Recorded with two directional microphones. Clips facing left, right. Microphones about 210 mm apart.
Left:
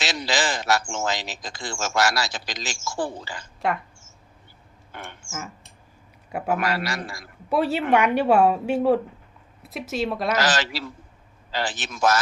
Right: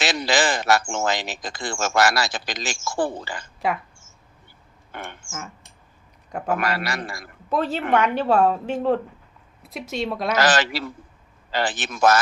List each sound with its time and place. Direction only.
0.0 s speech: 55° right (ahead or behind)
3.6 s a woman's voice: centre (ahead or behind)
4.9 s a sound: 55° right (ahead or behind)
6.6 s a man's voice: 55° right (ahead or behind)
7.5 s a woman's voice: 10° left (ahead or behind)
10.3 s a man's voice: 55° right (ahead or behind)